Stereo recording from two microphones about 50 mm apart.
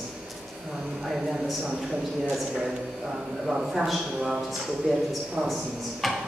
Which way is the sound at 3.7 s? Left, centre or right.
Centre.